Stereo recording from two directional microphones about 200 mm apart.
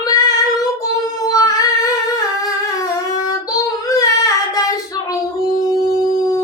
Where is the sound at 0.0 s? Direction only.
20° left (ahead or behind).